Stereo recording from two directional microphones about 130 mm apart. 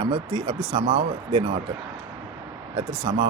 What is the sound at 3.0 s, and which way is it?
Speech, 45° right (ahead or behind).